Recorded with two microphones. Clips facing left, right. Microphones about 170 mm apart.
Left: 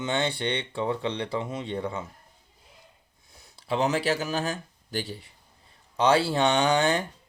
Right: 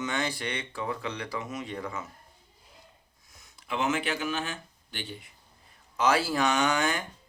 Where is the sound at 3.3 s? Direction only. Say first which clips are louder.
Left 6 dB; 30° left (ahead or behind).